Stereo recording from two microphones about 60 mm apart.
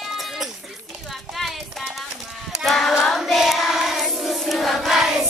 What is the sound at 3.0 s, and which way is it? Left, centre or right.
Choir, centre.